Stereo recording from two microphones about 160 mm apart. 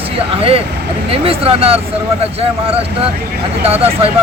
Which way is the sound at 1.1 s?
35° right (ahead or behind).